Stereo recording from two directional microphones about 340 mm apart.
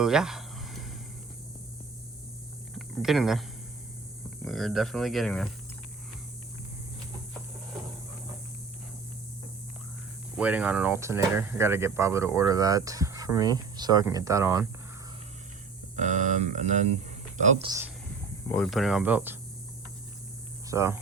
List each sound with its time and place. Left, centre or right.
0.0 s a sound: centre
2.7 s speech: centre
4.4 s speech: centre
10.3 s speech: centre
16.0 s speech: right
18.4 s speech: centre
20.7 s hum: centre